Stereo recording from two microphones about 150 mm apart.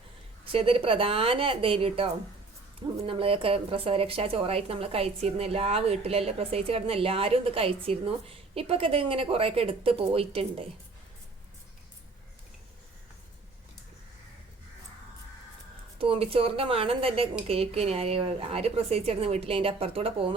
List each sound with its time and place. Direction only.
0.5 s speech: 35° right (ahead or behind)
16.0 s speech: 40° right (ahead or behind)